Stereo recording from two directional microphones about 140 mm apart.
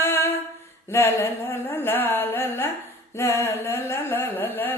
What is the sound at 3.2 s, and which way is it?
Carnatic music, 20° left (ahead or behind).